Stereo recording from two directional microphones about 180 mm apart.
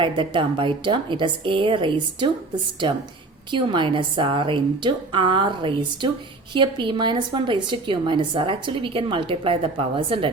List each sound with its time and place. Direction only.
0.0 s a woman's voice: 25° right (ahead or behind)
3.5 s a woman's voice: 25° right (ahead or behind)